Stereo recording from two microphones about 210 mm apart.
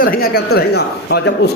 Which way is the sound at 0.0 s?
45° left (ahead or behind).